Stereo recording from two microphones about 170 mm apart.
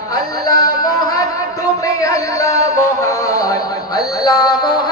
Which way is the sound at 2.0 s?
20° left (ahead or behind).